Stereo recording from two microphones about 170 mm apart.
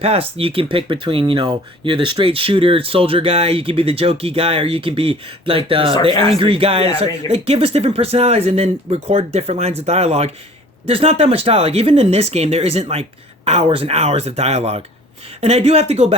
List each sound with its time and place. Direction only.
0.0 s speech: 35° right (ahead or behind)